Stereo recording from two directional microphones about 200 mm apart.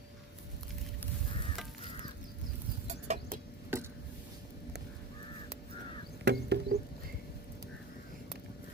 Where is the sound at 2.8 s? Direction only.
35° right (ahead or behind).